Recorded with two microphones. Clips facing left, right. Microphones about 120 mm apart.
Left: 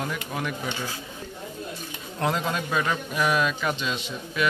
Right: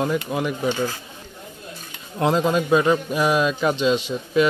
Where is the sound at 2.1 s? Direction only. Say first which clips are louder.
Right 7 dB; 20° right (ahead or behind).